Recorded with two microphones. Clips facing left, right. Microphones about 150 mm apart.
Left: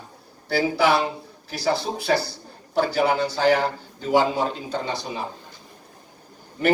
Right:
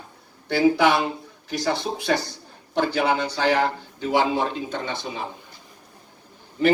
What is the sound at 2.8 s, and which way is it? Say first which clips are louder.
A man's voice: left 1 dB; 35° left (ahead or behind).